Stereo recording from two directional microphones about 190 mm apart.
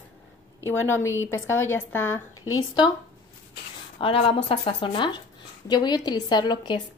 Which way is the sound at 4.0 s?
30° left (ahead or behind).